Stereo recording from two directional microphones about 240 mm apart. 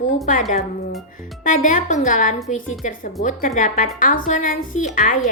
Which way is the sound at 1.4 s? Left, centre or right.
Left.